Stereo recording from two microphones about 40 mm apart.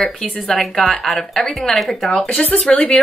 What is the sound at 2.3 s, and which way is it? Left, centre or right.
Speech, left.